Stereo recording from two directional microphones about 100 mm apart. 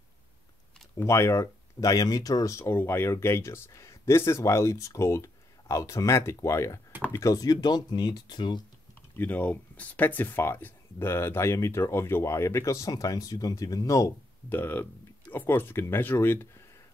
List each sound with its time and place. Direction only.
0.9 s speech: 30° left (ahead or behind); by 8.6 s 50° left (ahead or behind)
9.2 s speech: 15° left (ahead or behind); by 14.1 s 30° left (ahead or behind)
14.5 s speech: 20° left (ahead or behind)